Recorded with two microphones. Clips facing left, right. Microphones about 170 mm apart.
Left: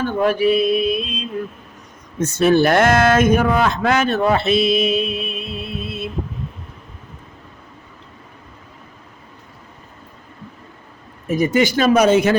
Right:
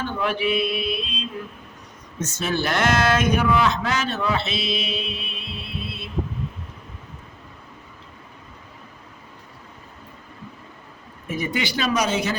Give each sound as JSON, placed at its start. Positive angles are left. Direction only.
{"t": 0.0, "sound": "a man's voice", "side_deg": 45}
{"t": 2.1, "sound": "a man's voice", "side_deg": 55}
{"t": 11.3, "sound": "a man's voice", "side_deg": 45}